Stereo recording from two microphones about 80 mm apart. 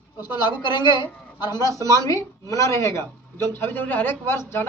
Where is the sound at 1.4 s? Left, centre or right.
Left.